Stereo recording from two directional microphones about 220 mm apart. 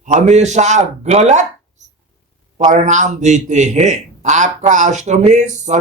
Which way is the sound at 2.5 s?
35° right (ahead or behind).